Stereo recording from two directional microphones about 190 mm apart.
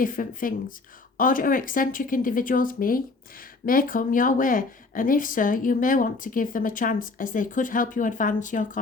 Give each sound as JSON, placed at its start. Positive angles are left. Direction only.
{"t": 0.0, "sound": "speech", "side_deg": 45}